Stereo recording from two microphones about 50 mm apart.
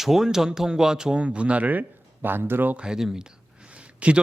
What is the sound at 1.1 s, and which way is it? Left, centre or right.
Speech, right.